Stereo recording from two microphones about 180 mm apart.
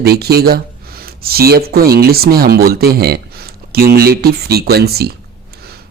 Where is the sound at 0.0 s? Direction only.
60° right (ahead or behind).